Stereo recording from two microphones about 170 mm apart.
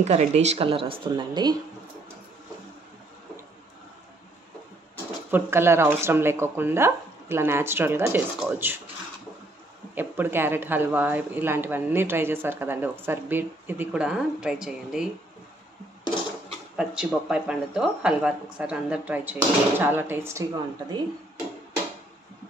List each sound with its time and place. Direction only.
0.0 s a woman's voice: 40° right (ahead or behind)
5.3 s speech: 15° right (ahead or behind)
9.9 s speech: 10° right (ahead or behind)
16.7 s speech: 5° right (ahead or behind); by 21.0 s 20° right (ahead or behind)